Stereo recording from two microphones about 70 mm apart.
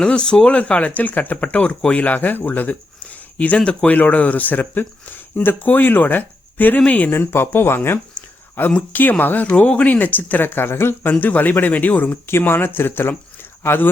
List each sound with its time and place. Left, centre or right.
0.0 s speech: centre
7.1 s speech: left